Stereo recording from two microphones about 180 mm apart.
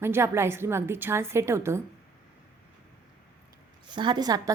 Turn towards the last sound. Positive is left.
turn(degrees=-20)  # may be behind; listen again after turning